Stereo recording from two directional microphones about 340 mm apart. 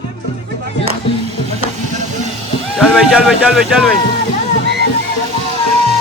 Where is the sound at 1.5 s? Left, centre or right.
Right.